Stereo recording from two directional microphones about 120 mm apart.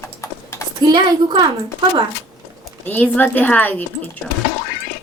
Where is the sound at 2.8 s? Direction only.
15° left (ahead or behind).